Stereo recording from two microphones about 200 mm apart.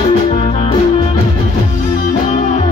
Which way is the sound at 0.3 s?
30° left (ahead or behind).